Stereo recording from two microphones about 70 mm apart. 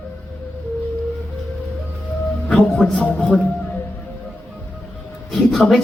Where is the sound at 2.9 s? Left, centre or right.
Centre.